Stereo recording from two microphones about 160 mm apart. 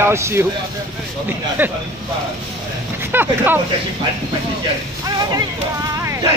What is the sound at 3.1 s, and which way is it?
Speech, 10° right (ahead or behind).